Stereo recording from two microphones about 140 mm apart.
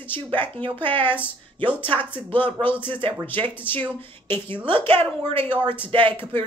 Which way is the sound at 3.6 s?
15° left (ahead or behind).